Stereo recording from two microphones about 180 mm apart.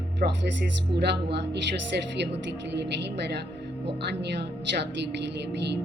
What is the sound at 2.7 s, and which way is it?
A woman's voice, 70° right (ahead or behind).